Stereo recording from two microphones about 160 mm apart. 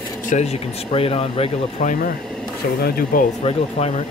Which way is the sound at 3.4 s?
40° left (ahead or behind).